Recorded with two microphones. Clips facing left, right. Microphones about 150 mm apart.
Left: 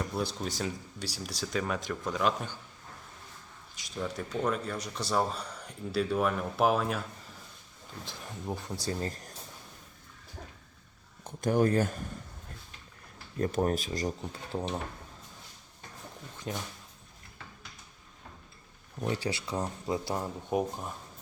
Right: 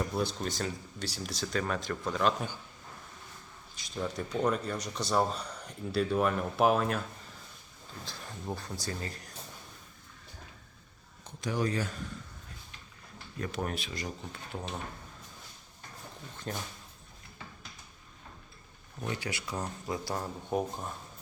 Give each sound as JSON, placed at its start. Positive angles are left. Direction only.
{"t": 0.0, "sound": "speech", "side_deg": 0}
{"t": 3.9, "sound": "speech", "side_deg": 0}
{"t": 8.4, "sound": "speech", "side_deg": 20}
{"t": 8.8, "sound": "speech", "side_deg": 30}
{"t": 11.2, "sound": "speech", "side_deg": 50}
{"t": 13.4, "sound": "speech", "side_deg": 40}
{"t": 14.5, "sound": "speech", "side_deg": 25}
{"t": 16.5, "sound": "speech", "side_deg": 10}
{"t": 19.0, "sound": "speech", "side_deg": 35}
{"t": 20.1, "sound": "speech", "side_deg": 10}